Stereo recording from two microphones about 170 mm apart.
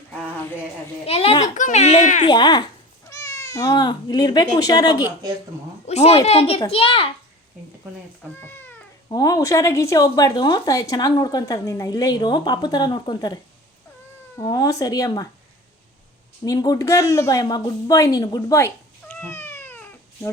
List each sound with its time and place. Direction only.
1.0 s a sound: 35° left (ahead or behind)
1.5 s speech: 45° left (ahead or behind)
2.2 s speech: 25° left (ahead or behind)
5.8 s a child's voice: 40° left (ahead or behind)
8.4 s cat: 10° left (ahead or behind)
9.0 s speech: 25° left (ahead or behind)
16.4 s a woman's voice: 20° left (ahead or behind)